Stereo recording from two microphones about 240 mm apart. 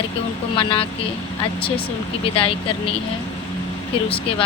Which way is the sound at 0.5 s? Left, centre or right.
Left.